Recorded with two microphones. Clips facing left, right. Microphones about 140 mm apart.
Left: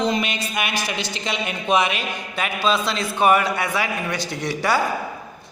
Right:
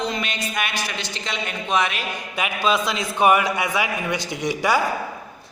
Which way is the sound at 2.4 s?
15° right (ahead or behind).